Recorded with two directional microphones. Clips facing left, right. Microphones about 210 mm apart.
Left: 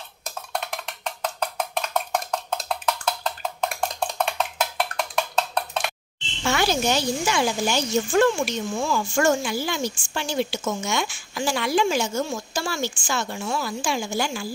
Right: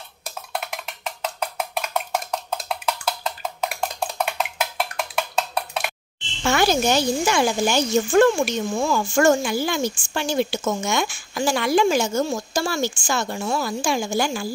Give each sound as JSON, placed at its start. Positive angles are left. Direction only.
{"t": 0.5, "sound": "percussion", "side_deg": -5}
{"t": 2.5, "sound": "a sound", "side_deg": 0}
{"t": 4.9, "sound": "wood block", "side_deg": -5}
{"t": 6.4, "sound": "speech", "side_deg": -50}